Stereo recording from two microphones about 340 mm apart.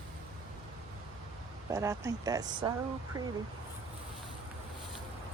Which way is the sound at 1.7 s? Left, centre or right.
Centre.